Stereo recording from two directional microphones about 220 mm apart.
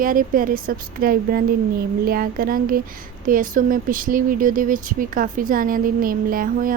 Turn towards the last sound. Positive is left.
turn(degrees=-40)  # may be behind; listen again after turning